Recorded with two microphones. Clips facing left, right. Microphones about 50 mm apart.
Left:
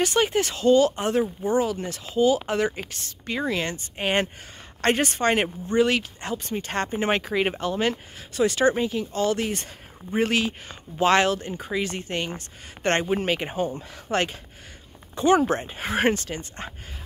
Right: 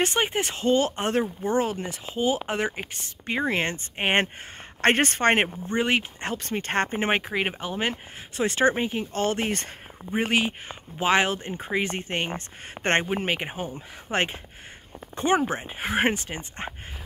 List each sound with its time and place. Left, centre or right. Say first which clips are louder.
0.0 s speech: left 3 dB; right
1.8 s speech: left 5 dB; right
5.7 s speech: left 3 dB; right
6.3 s speech: right 1 dB; right
7.1 s speech: left 2 dB; centre; by 9.5 s right
10.1 s speech: left 1 dB; centre
13.0 s speech: left 2 dB; centre
15.3 s speech: left 3 dB; centre